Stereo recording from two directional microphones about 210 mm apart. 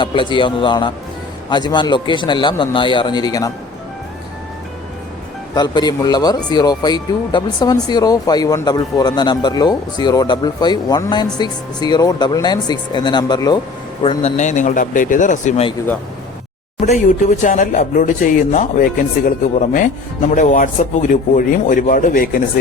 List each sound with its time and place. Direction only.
0.0 s speech: 25° left (ahead or behind)
5.5 s speech: 20° left (ahead or behind)
16.8 s speech: 35° left (ahead or behind)
20.2 s speech: 35° left (ahead or behind)